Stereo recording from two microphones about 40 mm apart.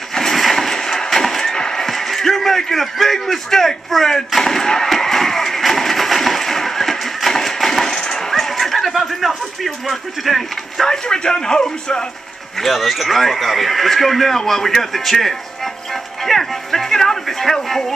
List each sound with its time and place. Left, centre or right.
0.1 s a sound: centre
10.9 s speech: centre
12.5 s speech: centre